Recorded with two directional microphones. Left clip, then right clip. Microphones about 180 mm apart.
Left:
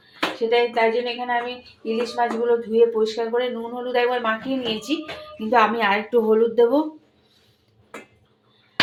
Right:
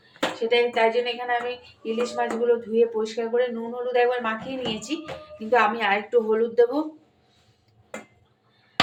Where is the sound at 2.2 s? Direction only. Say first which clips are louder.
Left 3 dB; 30° left (ahead or behind).